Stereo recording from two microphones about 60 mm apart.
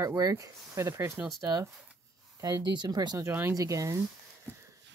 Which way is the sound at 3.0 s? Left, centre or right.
Right.